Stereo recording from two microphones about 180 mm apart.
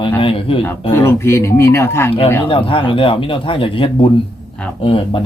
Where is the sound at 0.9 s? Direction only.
15° left (ahead or behind).